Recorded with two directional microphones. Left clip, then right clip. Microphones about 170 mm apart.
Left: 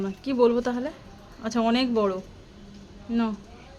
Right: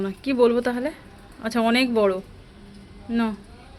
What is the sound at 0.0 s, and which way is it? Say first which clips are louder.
A woman's voice: right 2 dB; 10° right (ahead or behind).